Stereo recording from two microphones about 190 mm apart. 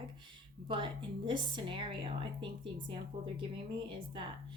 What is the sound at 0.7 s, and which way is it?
A woman's voice, 25° right (ahead or behind).